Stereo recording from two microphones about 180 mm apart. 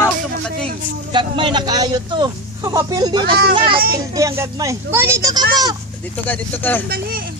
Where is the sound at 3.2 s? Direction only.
60° right (ahead or behind).